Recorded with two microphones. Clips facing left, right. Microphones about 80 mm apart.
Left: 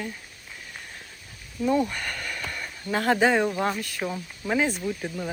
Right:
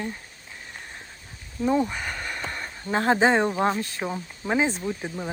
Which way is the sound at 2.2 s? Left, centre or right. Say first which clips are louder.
Right 1 dB; right.